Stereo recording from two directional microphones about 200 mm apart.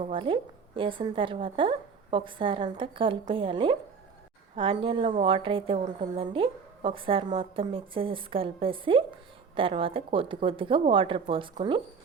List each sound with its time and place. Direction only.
0.0 s a woman's voice: 25° right (ahead or behind)